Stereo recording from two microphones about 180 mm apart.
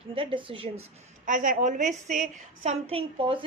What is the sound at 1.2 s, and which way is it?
A woman's voice, 45° right (ahead or behind).